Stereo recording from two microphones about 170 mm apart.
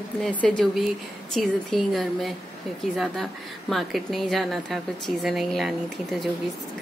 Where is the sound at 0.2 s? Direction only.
5° left (ahead or behind).